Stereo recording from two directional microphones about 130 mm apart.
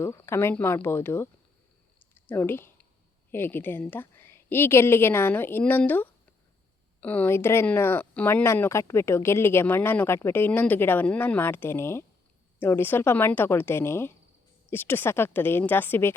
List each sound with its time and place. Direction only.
0.0 s speech: 20° left (ahead or behind)
2.0 s a sound: 15° left (ahead or behind)
3.3 s speech: 15° left (ahead or behind)